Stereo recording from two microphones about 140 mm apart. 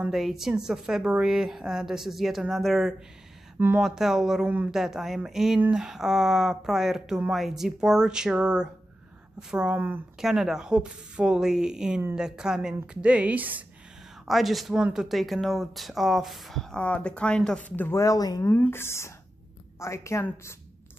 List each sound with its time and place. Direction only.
0.0 s speech: centre (ahead or behind)
3.5 s speech: 15° right (ahead or behind)
3.8 s a woman's voice: 5° right (ahead or behind)
10.2 s a woman's voice: 5° right (ahead or behind)
14.2 s speech: centre (ahead or behind); by 20.5 s 20° left (ahead or behind)